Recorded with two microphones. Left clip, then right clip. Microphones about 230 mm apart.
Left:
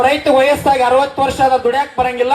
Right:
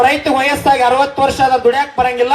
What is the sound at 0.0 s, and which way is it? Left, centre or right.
Speech, right.